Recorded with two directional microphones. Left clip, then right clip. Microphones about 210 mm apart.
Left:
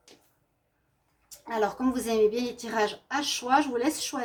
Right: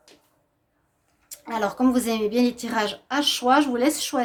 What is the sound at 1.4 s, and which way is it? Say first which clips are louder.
A woman's voice: right 4 dB; 45° right (ahead or behind).